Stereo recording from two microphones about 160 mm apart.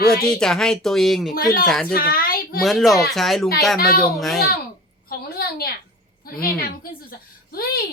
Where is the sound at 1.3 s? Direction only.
65° left (ahead or behind).